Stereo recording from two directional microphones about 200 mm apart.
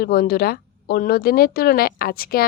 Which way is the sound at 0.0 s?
50° left (ahead or behind).